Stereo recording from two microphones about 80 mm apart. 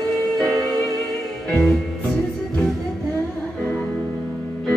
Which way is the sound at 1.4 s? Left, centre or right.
Centre.